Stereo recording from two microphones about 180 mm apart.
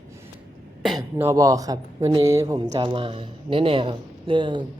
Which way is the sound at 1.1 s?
15° right (ahead or behind).